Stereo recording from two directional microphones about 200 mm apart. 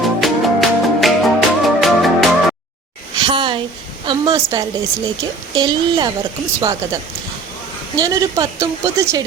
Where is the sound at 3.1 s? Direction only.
25° right (ahead or behind).